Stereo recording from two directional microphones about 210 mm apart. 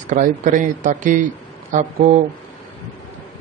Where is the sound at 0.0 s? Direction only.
35° right (ahead or behind).